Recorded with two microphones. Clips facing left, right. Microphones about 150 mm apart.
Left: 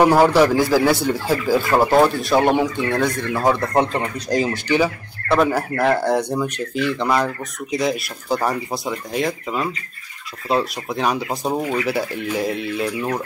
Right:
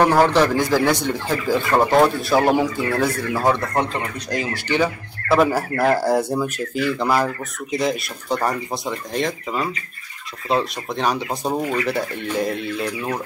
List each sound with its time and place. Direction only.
0.0 s speech: 10° left (ahead or behind); by 3.5 s 5° right (ahead or behind)
4.3 s speech: 35° left (ahead or behind)
4.6 s speech: 10° left (ahead or behind)
5.3 s speech: 5° right (ahead or behind)